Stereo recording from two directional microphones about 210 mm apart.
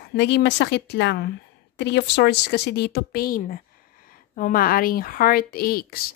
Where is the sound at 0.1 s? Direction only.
55° left (ahead or behind).